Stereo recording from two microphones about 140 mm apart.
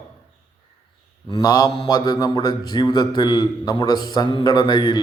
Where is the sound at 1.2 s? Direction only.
30° left (ahead or behind).